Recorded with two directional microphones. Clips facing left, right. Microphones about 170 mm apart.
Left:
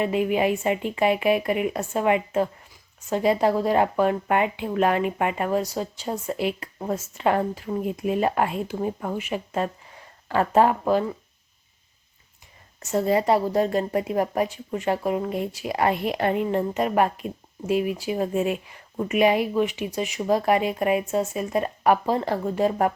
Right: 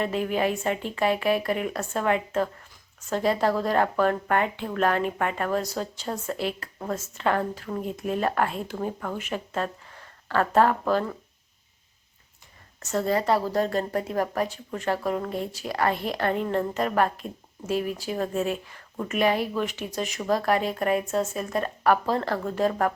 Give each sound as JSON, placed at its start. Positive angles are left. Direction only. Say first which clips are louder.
{"t": 0.0, "sound": "speech", "louder": "left 3 dB", "side_deg": 10}
{"t": 7.5, "sound": "speech", "louder": "left 4 dB", "side_deg": 5}
{"t": 12.9, "sound": "speech", "louder": "left 3 dB", "side_deg": 20}